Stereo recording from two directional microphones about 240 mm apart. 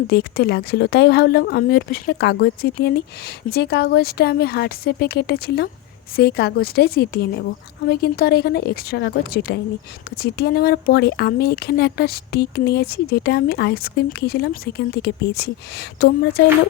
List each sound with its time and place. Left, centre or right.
0.1 s speech: left